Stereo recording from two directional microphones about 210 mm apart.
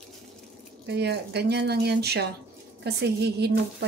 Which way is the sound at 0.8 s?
55° right (ahead or behind).